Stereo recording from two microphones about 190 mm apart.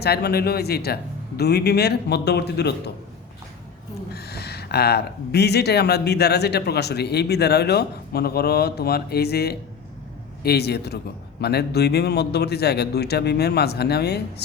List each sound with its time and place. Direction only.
0.0 s speech: 60° left (ahead or behind)
4.1 s speech: 60° left (ahead or behind)